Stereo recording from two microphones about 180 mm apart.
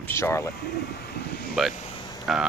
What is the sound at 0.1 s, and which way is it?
Speech, 15° left (ahead or behind).